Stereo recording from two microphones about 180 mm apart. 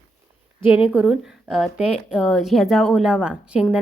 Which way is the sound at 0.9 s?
5° right (ahead or behind).